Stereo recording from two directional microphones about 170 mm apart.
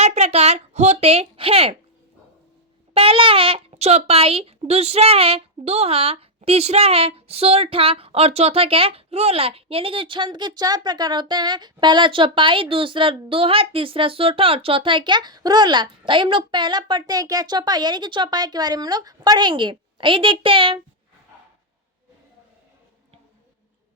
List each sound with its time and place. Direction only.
0.0 s a woman's voice: 40° right (ahead or behind)
2.9 s a child's voice: 35° right (ahead or behind)